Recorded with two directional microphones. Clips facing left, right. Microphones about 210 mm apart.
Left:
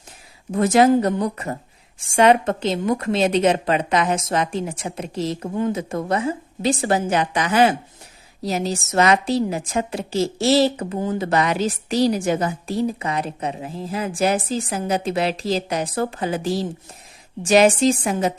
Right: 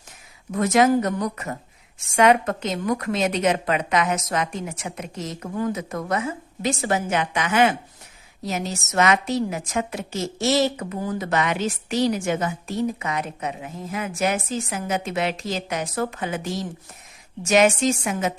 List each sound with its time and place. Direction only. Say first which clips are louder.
0.5 s a woman's voice: left 3 dB; 30° left (ahead or behind)